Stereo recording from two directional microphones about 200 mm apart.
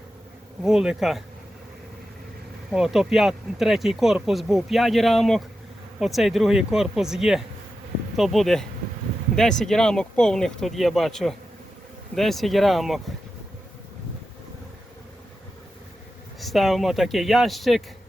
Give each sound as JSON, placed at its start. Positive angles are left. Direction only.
{"t": 0.6, "sound": "speech", "side_deg": -5}
{"t": 2.7, "sound": "speech", "side_deg": 0}
{"t": 16.4, "sound": "speech", "side_deg": 0}